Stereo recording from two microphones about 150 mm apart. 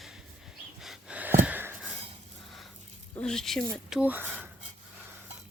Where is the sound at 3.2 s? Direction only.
5° left (ahead or behind).